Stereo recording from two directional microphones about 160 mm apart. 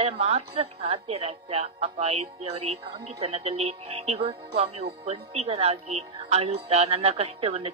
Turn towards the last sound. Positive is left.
turn(degrees=-40)  # may be behind; listen again after turning